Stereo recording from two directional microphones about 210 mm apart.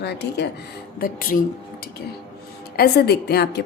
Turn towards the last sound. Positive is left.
turn(degrees=50)  # may be behind; listen again after turning